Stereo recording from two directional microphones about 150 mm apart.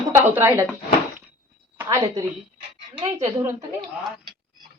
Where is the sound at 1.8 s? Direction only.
20° right (ahead or behind).